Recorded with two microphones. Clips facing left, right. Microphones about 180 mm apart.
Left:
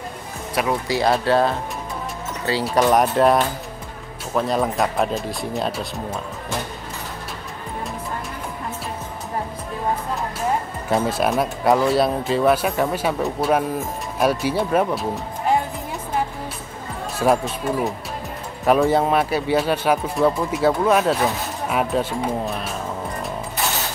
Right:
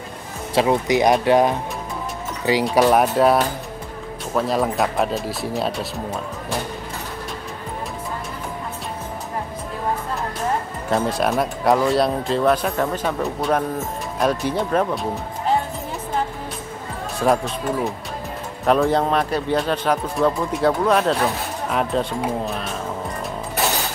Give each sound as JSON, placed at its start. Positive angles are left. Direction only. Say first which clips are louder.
{"t": 0.6, "sound": "speech", "louder": "right 4 dB", "side_deg": -20}
{"t": 2.7, "sound": "speech", "louder": "even", "side_deg": -5}
{"t": 10.9, "sound": "speech", "louder": "even", "side_deg": 0}
{"t": 17.2, "sound": "speech", "louder": "even", "side_deg": 5}
{"t": 18.7, "sound": "speech", "louder": "left 1 dB", "side_deg": 5}